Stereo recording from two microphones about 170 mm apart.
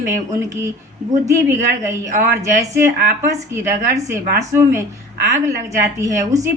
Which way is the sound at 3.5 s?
20° right (ahead or behind).